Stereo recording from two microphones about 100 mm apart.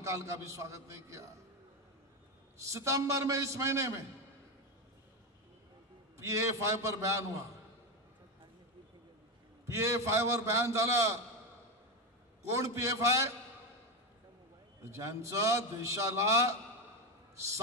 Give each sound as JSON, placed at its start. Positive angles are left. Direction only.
{"t": 0.0, "sound": "a man's voice", "side_deg": -30}
{"t": 2.5, "sound": "a man's voice", "side_deg": -30}
{"t": 6.1, "sound": "a man's voice", "side_deg": -30}
{"t": 9.7, "sound": "a man's voice", "side_deg": -30}
{"t": 12.4, "sound": "a man's voice", "side_deg": -30}
{"t": 14.9, "sound": "a man's voice", "side_deg": -30}